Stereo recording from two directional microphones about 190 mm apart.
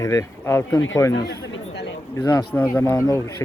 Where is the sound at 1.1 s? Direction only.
70° left (ahead or behind).